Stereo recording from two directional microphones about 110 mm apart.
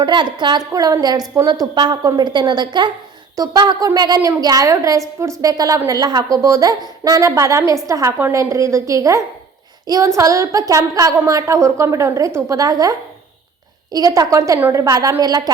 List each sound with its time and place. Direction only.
0.0 s a woman's voice: 45° right (ahead or behind)
0.7 s a woman's voice: 35° right (ahead or behind)